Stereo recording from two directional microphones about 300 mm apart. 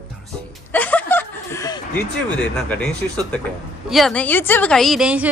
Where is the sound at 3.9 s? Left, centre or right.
Centre.